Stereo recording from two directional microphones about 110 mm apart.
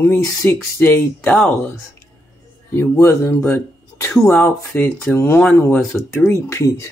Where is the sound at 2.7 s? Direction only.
20° left (ahead or behind).